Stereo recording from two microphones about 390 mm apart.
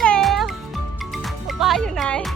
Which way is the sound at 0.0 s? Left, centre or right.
Centre.